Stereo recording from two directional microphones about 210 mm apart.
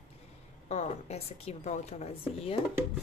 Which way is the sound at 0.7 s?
35° left (ahead or behind).